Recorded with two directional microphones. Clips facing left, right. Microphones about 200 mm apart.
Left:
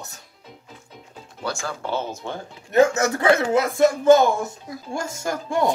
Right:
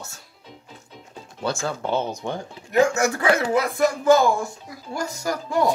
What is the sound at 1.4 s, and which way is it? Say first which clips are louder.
Speech: right 3 dB; 20° right (ahead or behind).